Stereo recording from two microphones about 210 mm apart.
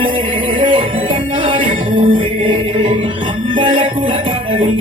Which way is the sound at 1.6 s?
35° right (ahead or behind).